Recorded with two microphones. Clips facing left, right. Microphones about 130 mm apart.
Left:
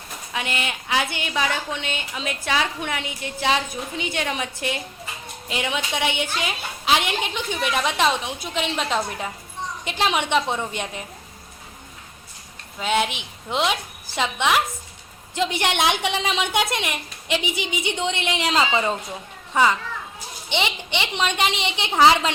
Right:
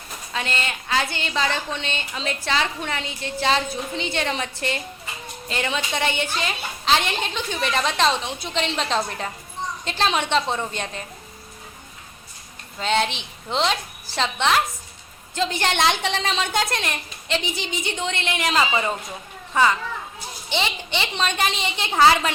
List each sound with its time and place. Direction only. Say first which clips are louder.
0.3 s a woman's voice: even; 10° left (ahead or behind)
12.8 s a woman's voice: even; 10° left (ahead or behind)
20.5 s a woman's voice: left 1 dB; 20° left (ahead or behind)